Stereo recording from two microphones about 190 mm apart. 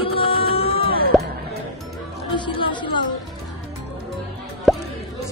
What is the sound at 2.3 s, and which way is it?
Speech, 25° left (ahead or behind).